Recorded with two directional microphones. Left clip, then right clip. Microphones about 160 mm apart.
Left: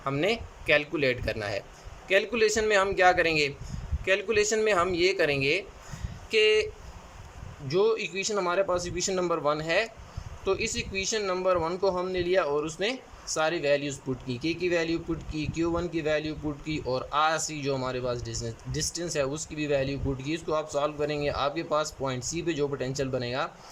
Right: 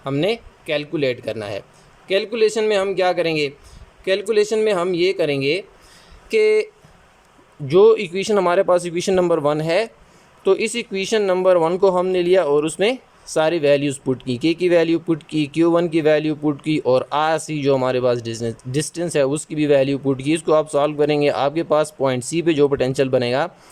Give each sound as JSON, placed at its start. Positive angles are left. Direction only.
{"t": 0.0, "sound": "speech", "side_deg": -20}
{"t": 6.3, "sound": "speech", "side_deg": -35}
{"t": 7.7, "sound": "a man's voice", "side_deg": -50}